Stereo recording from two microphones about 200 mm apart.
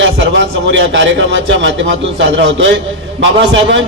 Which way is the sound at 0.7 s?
65° right (ahead or behind).